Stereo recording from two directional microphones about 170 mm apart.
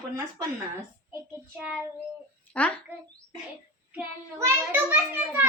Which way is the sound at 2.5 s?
10° left (ahead or behind).